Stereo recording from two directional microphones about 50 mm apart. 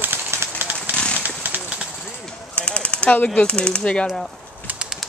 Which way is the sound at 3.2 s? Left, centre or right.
Left.